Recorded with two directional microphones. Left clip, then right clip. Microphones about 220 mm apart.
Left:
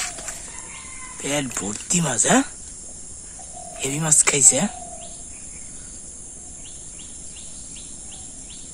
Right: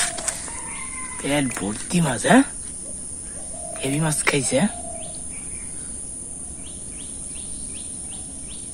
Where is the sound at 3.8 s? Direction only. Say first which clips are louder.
Left 2 dB; 15° left (ahead or behind).